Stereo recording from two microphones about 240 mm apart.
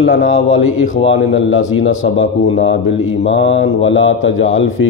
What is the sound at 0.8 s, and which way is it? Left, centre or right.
Speech, left.